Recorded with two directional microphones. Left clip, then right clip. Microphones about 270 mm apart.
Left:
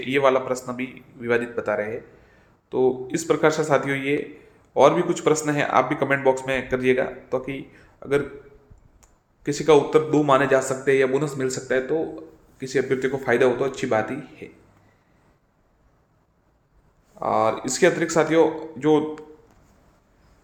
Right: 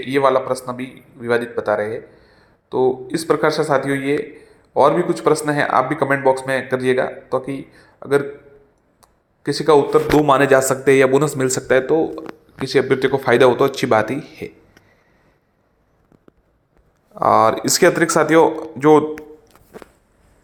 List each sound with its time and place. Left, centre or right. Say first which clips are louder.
0.1 s a man's voice: right 4 dB; centre; by 14.5 s right
17.2 s a man's voice: right 8 dB; right